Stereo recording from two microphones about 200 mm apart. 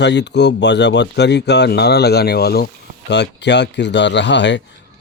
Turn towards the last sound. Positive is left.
turn(degrees=60)  # may be behind; listen again after turning